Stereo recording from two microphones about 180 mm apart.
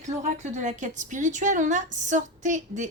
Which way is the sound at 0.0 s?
40° right (ahead or behind).